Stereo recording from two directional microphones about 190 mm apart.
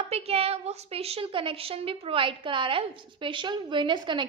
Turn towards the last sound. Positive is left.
turn(degrees=-25)  # may be behind; listen again after turning